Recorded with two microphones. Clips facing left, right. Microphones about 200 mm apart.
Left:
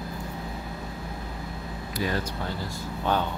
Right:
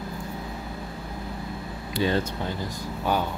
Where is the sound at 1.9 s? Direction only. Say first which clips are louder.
Right 5 dB; 25° right (ahead or behind).